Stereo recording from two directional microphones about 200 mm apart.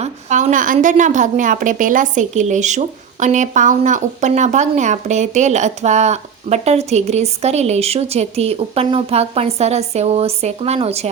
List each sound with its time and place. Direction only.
0.0 s a woman's voice: 35° right (ahead or behind)